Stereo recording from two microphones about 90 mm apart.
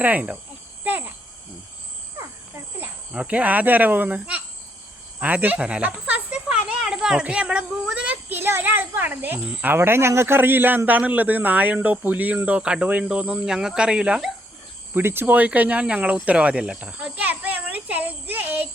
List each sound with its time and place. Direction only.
0.0 s speech: 15° right (ahead or behind)
3.1 s speech: 15° right (ahead or behind)
5.2 s snake: 20° right (ahead or behind)
7.9 s a sound: 15° right (ahead or behind)
9.6 s a man's voice: 25° right (ahead or behind); by 14.3 s 10° right (ahead or behind)
14.9 s speech: 25° right (ahead or behind)
16.1 s cricket: 15° right (ahead or behind)